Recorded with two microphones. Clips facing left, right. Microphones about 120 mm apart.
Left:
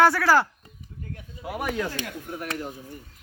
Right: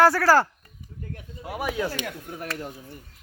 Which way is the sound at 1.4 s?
Centre (ahead or behind).